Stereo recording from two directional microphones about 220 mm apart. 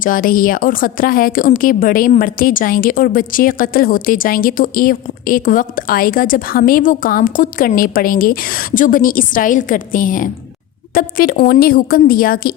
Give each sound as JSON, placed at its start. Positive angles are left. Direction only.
{"t": 0.0, "sound": "a woman's voice", "side_deg": 40}